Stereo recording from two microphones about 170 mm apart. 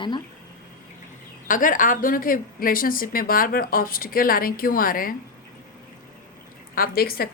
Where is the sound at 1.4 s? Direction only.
50° left (ahead or behind).